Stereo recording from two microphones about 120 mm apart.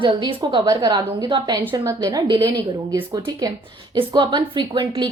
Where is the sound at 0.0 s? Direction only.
45° right (ahead or behind).